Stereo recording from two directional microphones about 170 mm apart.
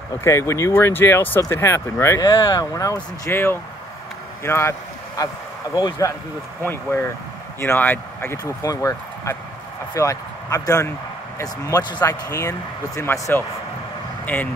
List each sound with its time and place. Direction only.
0.2 s speech: 15° left (ahead or behind)